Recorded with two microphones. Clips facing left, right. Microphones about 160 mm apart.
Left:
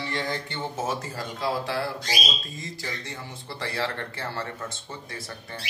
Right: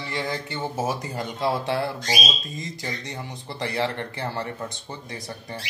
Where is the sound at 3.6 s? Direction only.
20° right (ahead or behind).